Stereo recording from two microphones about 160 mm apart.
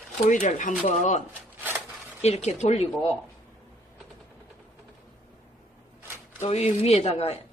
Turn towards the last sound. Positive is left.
turn(degrees=40)  # may be behind; listen again after turning